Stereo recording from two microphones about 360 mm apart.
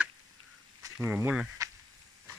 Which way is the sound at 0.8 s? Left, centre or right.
Centre.